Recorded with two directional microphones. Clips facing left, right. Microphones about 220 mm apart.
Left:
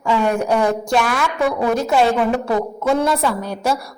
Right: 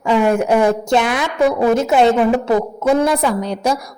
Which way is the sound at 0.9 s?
20° right (ahead or behind).